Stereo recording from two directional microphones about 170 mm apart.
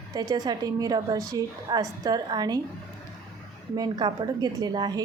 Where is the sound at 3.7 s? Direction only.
25° right (ahead or behind).